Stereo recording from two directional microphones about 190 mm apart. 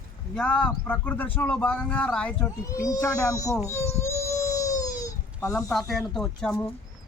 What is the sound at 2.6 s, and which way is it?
Speech, 15° left (ahead or behind).